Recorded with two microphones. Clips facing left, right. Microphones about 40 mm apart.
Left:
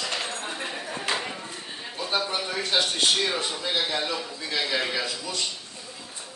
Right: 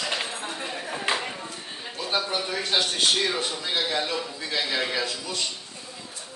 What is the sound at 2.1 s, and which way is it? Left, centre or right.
Speech, centre.